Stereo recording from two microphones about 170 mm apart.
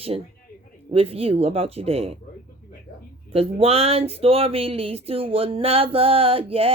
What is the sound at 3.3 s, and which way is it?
Speech, 35° right (ahead or behind).